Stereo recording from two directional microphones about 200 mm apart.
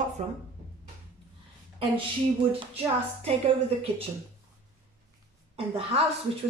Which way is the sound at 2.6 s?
30° right (ahead or behind).